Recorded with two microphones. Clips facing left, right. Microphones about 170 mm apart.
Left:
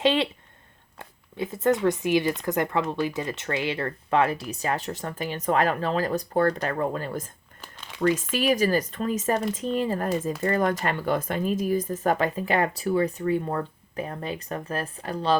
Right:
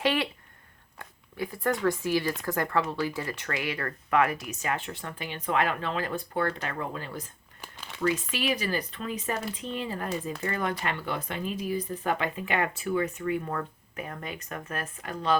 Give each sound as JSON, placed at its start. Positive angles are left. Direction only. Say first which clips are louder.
{"t": 0.0, "sound": "speech", "louder": "left 4 dB", "side_deg": 25}